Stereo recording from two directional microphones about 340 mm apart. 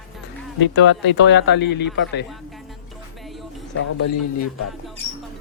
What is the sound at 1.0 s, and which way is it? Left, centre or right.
Speech, left.